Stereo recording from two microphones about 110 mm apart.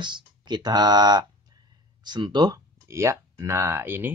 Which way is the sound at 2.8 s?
25° right (ahead or behind).